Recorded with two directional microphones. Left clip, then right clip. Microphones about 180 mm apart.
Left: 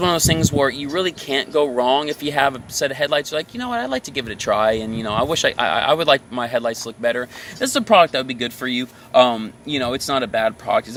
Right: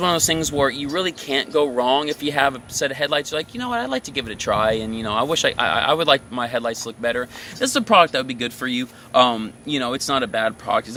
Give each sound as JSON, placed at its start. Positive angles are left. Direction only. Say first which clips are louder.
{"t": 0.0, "sound": "speech", "louder": "left 1 dB", "side_deg": 20}